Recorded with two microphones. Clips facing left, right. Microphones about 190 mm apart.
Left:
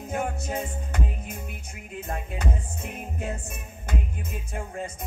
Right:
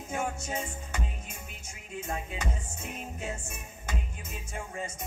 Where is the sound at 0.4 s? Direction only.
60° left (ahead or behind).